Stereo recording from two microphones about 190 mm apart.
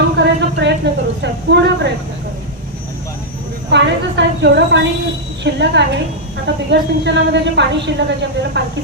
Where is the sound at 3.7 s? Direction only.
65° right (ahead or behind).